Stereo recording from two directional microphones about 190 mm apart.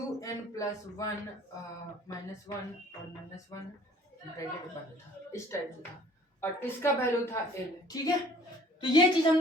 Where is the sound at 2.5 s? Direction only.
25° left (ahead or behind).